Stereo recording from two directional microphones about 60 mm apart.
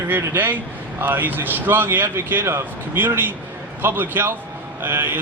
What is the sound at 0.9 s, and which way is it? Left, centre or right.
Speech, right.